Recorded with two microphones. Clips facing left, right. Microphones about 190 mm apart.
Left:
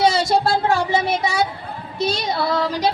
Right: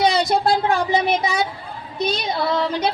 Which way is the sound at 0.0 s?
20° right (ahead or behind).